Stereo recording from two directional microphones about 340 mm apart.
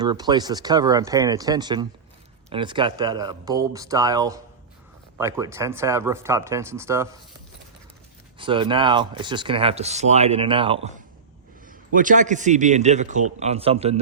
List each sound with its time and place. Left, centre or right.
0.0 s speech: centre
8.4 s a man's voice: centre